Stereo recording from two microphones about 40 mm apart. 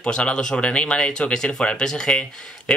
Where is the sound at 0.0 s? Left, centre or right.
Left.